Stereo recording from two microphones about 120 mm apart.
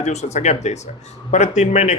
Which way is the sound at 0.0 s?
70° left (ahead or behind).